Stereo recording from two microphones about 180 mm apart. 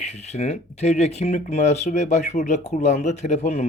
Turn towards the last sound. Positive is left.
turn(degrees=40)  # may be behind; listen again after turning